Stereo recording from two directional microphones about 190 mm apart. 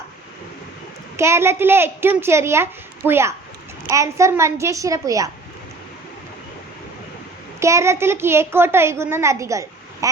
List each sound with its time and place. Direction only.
1.1 s a child's voice: 15° right (ahead or behind)
7.6 s a child's voice: 15° right (ahead or behind)